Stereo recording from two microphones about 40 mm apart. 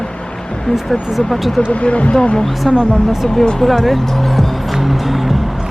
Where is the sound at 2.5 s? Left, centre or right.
Centre.